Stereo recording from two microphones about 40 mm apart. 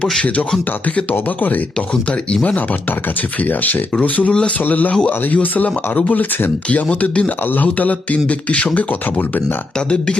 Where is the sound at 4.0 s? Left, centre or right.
Left.